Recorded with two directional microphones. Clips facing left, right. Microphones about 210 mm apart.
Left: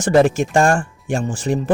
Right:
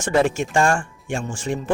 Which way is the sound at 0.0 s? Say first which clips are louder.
Left 5 dB; 35° left (ahead or behind).